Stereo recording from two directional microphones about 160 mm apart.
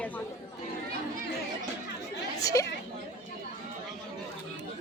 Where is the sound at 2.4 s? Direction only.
20° left (ahead or behind).